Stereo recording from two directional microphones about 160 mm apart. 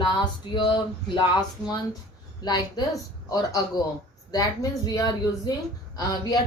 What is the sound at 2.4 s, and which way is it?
A woman's voice, 25° left (ahead or behind).